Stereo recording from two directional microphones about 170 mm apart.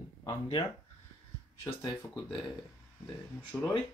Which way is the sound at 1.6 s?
25° left (ahead or behind).